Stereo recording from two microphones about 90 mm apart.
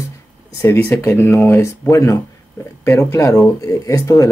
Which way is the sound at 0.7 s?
20° left (ahead or behind).